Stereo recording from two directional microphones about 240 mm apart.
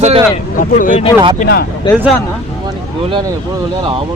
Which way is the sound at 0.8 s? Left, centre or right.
Left.